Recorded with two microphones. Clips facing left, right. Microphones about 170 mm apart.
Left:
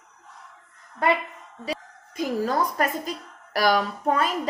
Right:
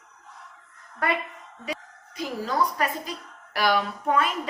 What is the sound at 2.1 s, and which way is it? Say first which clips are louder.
Speech: left 3 dB; 50° left (ahead or behind).